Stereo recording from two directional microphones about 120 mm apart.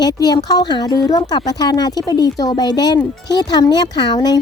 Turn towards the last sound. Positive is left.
turn(degrees=35)  # may be behind; listen again after turning